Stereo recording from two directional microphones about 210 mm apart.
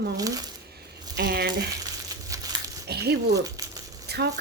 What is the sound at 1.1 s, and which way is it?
Speech, 50° right (ahead or behind).